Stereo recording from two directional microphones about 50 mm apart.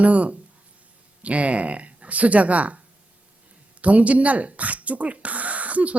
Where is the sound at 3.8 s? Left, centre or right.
Right.